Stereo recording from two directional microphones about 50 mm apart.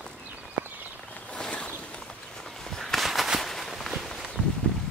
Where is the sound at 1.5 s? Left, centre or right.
Left.